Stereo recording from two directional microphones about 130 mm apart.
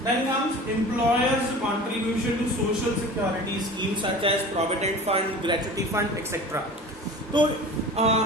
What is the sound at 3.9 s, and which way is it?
Speech, 45° right (ahead or behind).